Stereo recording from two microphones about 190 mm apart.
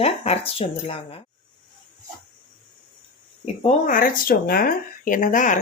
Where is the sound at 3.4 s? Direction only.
35° left (ahead or behind).